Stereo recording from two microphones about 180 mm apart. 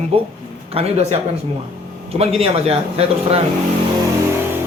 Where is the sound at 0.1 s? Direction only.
35° right (ahead or behind).